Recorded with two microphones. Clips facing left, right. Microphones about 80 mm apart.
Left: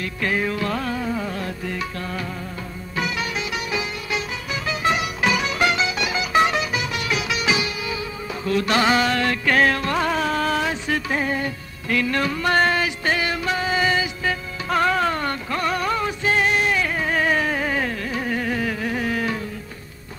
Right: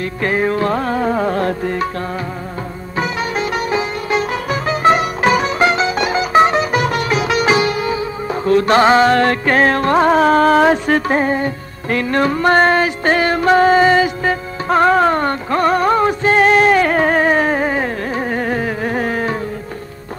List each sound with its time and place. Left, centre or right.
0.0 s music: right
3.0 s music: right
17.2 s carnatic music: right